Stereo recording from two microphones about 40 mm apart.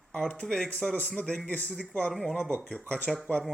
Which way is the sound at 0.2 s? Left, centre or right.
Centre.